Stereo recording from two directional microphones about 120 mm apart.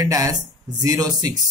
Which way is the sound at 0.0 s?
30° right (ahead or behind).